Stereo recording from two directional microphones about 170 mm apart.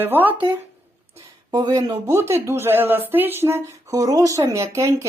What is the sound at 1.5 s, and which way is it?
Speech, 25° right (ahead or behind).